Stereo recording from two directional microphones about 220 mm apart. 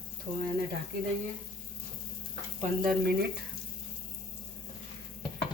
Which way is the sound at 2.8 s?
40° right (ahead or behind).